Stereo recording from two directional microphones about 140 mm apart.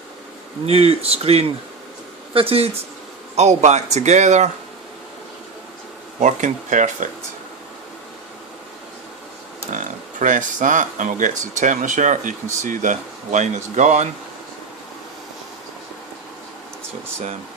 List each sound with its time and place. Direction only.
0.6 s speech: 45° right (ahead or behind)
3.3 s speech: 55° right (ahead or behind)
6.1 s speech: 60° right (ahead or behind)
9.7 s speech: 65° right (ahead or behind)